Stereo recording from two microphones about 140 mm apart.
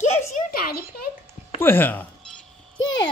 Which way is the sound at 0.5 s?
90° left.